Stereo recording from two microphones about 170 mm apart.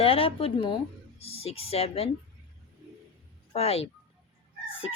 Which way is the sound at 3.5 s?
35° left (ahead or behind).